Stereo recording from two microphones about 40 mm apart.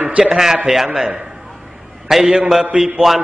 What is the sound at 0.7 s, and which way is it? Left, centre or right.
Speech, right.